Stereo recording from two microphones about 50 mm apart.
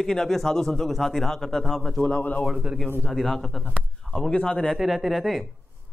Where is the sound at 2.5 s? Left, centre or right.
Centre.